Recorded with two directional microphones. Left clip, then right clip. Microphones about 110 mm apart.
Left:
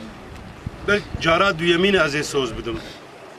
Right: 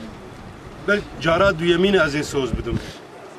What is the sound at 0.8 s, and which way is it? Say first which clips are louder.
Speech: left 1 dB; centre (ahead or behind).